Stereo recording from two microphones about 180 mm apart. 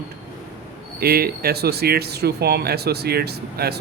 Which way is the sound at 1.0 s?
60° right (ahead or behind).